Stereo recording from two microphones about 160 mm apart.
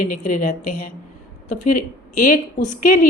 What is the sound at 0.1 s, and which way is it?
A woman's voice, 55° left (ahead or behind).